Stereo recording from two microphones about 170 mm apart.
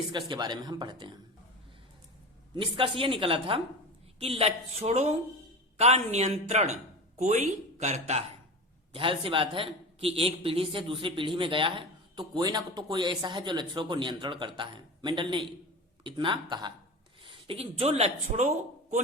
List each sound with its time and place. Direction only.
0.1 s a man's voice: 25° right (ahead or behind)
2.6 s a woman's voice: 30° right (ahead or behind)
8.9 s a man's voice: 30° right (ahead or behind)